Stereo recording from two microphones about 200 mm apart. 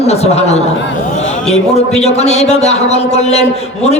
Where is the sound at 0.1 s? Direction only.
30° left (ahead or behind).